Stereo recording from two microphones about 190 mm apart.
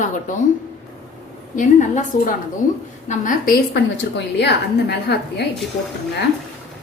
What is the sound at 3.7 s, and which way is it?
A woman's voice, 65° left (ahead or behind).